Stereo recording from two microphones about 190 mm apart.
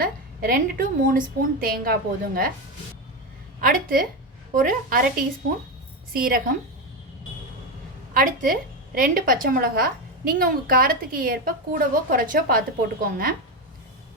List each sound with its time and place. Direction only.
0.0 s a woman's voice: 50° right (ahead or behind)
3.6 s a woman's voice: 45° right (ahead or behind)
6.1 s a woman's voice: 50° right (ahead or behind)
8.1 s a woman's voice: 45° right (ahead or behind)